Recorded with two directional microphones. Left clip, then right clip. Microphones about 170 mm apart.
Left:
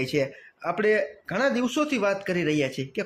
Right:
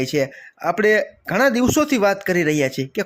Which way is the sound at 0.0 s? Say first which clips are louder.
Right 5 dB; 20° right (ahead or behind).